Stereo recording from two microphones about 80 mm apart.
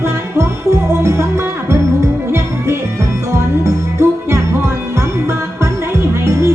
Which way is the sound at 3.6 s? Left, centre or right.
Right.